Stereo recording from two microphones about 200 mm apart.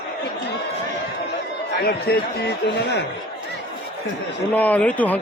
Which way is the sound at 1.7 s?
55° left (ahead or behind).